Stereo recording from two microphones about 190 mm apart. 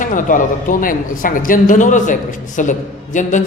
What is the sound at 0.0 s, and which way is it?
A man's voice, 45° left (ahead or behind).